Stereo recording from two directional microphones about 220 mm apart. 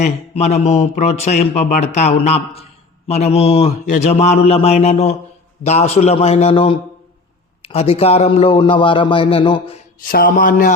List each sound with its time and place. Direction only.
0.0 s speech: 30° left (ahead or behind)
10.1 s a man's voice: 40° left (ahead or behind)